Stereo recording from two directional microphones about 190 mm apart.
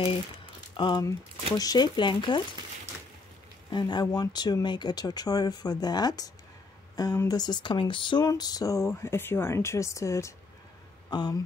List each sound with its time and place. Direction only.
0.7 s speech: 25° left (ahead or behind)
3.7 s speech: 20° left (ahead or behind)